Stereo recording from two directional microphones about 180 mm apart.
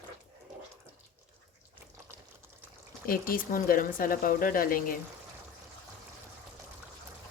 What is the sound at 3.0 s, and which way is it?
Speech, 55° left (ahead or behind).